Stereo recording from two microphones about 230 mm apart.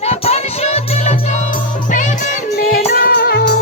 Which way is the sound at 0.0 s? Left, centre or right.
Left.